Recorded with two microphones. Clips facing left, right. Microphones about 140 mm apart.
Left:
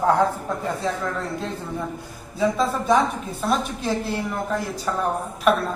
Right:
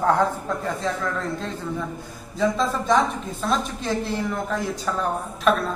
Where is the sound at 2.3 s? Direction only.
10° left (ahead or behind).